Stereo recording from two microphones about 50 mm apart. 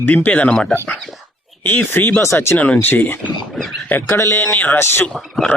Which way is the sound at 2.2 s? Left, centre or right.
Left.